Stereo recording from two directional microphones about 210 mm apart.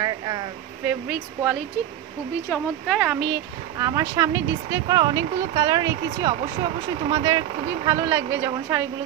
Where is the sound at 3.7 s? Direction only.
15° right (ahead or behind).